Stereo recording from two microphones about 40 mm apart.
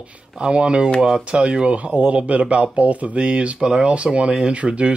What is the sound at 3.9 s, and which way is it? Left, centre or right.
Speech, right.